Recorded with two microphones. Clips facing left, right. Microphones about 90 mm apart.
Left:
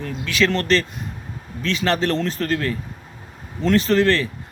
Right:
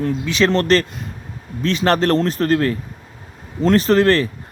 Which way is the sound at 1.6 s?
40° right (ahead or behind).